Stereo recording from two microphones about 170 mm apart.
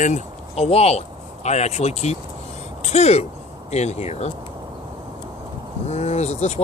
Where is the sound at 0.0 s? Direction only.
40° left (ahead or behind).